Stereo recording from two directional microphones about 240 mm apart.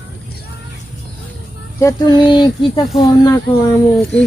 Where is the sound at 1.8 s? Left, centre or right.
Centre.